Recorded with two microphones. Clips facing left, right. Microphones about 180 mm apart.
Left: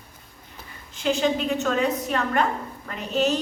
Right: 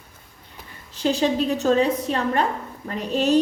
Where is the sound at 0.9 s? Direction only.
35° right (ahead or behind).